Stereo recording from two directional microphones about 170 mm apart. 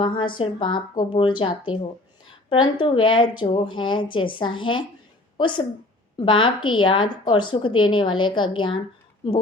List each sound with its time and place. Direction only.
0.0 s a woman's voice: 30° left (ahead or behind)